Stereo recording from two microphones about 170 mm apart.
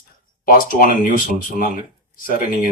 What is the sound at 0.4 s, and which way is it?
Speech, 55° left (ahead or behind).